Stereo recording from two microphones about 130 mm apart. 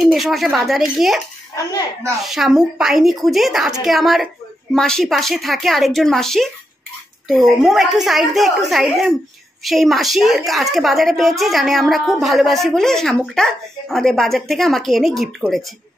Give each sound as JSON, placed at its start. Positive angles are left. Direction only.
{"t": 0.0, "sound": "a woman's voice", "side_deg": 0}
{"t": 1.5, "sound": "a child's voice", "side_deg": 30}
{"t": 2.2, "sound": "a woman's voice", "side_deg": -5}